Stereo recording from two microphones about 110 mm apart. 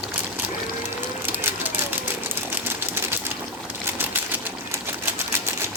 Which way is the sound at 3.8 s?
20° right (ahead or behind).